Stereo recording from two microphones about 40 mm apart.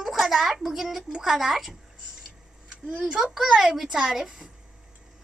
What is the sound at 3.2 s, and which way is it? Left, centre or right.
A child's voice, centre.